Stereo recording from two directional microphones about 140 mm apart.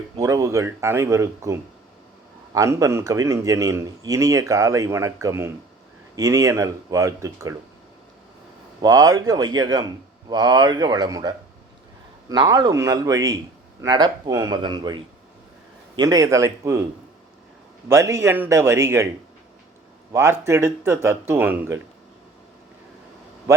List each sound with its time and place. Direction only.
0.2 s a man's voice: 25° right (ahead or behind)
8.8 s a man's voice: 25° right (ahead or behind)
17.8 s a man's voice: 20° right (ahead or behind)
20.1 s speech: 20° right (ahead or behind)
23.5 s a man's voice: 20° right (ahead or behind)